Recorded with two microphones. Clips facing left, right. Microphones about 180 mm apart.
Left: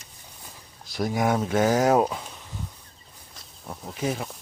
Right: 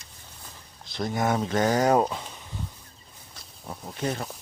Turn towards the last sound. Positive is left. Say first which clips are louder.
# left 1 dB
turn(degrees=0)  # may be behind; listen again after turning